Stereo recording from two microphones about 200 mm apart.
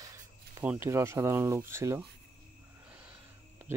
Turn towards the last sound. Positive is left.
turn(degrees=-10)  # may be behind; listen again after turning